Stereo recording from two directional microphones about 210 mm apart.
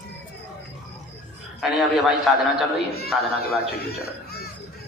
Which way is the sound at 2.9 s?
45° left (ahead or behind).